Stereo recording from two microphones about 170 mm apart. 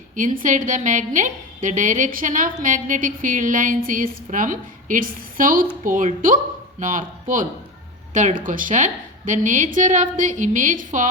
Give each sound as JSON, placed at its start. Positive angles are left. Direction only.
{"t": 0.2, "sound": "a woman's voice", "side_deg": -50}